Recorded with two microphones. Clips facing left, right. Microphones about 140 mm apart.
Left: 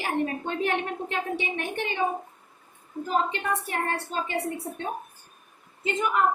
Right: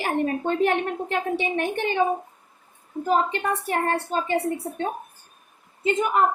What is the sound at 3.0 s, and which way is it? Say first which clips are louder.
Speech: right 5 dB; 20° right (ahead or behind).